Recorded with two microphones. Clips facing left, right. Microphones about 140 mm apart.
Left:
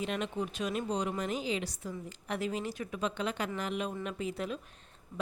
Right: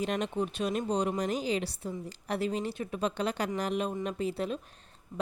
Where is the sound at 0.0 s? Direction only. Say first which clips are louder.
Right 3 dB; 40° right (ahead or behind).